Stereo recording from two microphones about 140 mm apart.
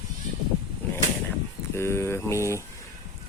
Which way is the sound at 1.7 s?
20° left (ahead or behind).